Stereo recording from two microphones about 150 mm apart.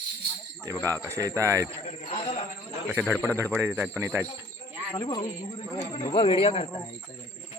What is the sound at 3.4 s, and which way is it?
Speech, 15° right (ahead or behind).